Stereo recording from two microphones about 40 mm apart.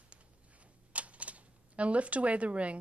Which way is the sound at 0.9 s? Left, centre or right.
Right.